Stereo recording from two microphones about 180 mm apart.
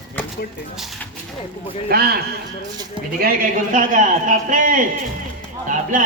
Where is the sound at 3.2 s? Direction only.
50° right (ahead or behind).